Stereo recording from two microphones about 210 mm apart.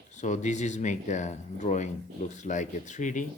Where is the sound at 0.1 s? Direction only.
35° left (ahead or behind).